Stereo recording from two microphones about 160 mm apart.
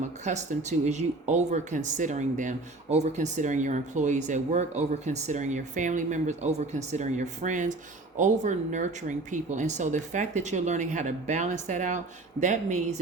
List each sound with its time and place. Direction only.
0.3 s speech: 45° right (ahead or behind)